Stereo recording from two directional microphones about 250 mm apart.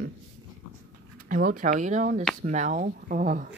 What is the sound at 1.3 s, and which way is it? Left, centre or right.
Speech, right.